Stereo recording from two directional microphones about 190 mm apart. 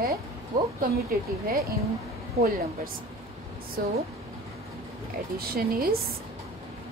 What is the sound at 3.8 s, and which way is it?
Speech, 50° right (ahead or behind).